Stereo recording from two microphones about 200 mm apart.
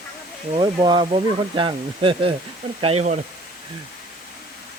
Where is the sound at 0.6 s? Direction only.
20° right (ahead or behind).